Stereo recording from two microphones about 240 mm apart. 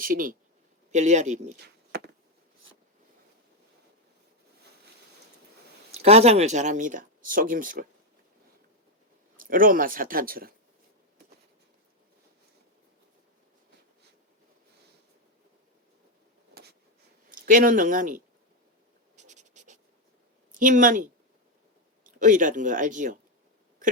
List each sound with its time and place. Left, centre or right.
0.0 s a man's voice: right
5.9 s speech: right
9.4 s speech: right
17.2 s speech: right
19.1 s writing: right
20.5 s speech: right
23.8 s a sound: right